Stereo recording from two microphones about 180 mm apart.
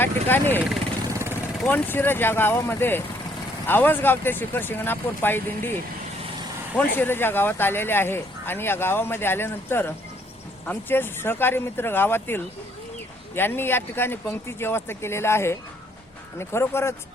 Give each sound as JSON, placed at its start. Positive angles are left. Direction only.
{"t": 0.0, "sound": "speech", "side_deg": 10}
{"t": 1.0, "sound": "vehicle", "side_deg": -15}
{"t": 1.6, "sound": "speech", "side_deg": 10}
{"t": 6.7, "sound": "speech", "side_deg": 10}